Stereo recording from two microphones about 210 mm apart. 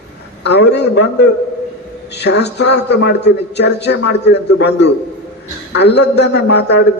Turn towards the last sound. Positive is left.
turn(degrees=55)  # may be behind; listen again after turning